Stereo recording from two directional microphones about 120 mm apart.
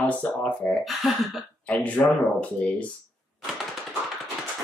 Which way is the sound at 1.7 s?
15° left (ahead or behind).